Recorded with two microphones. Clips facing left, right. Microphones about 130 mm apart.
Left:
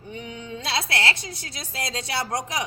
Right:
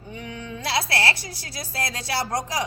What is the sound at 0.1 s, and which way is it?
A woman's voice, 25° left (ahead or behind).